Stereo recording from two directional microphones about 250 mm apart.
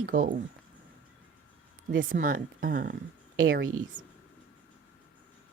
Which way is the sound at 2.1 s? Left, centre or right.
Right.